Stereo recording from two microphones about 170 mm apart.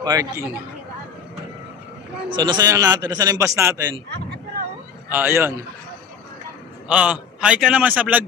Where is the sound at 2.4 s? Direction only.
25° right (ahead or behind).